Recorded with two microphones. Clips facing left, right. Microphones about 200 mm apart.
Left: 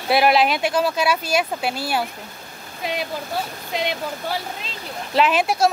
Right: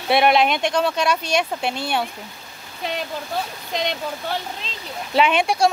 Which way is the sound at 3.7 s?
5° left (ahead or behind).